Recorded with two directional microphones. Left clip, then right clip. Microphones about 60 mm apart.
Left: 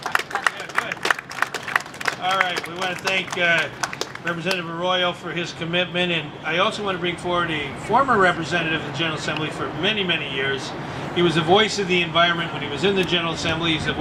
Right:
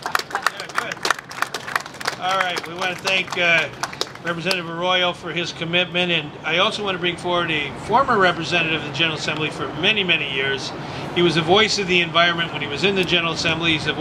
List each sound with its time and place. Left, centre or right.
0.1 s a sound: right
2.8 s a man's voice: right
4.8 s a man's voice: right